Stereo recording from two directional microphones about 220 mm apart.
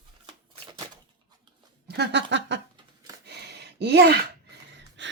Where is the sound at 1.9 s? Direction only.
50° right (ahead or behind).